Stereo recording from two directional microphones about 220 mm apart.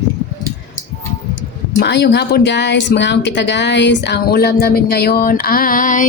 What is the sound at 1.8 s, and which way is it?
Speech, 50° left (ahead or behind).